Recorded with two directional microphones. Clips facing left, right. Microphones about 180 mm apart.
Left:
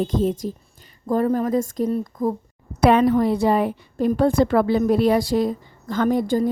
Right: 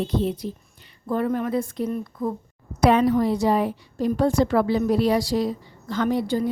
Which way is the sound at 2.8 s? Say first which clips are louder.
Left 2 dB; 60° left (ahead or behind).